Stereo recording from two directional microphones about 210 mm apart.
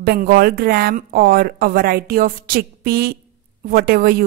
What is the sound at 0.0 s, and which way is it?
A woman's voice, 45° right (ahead or behind).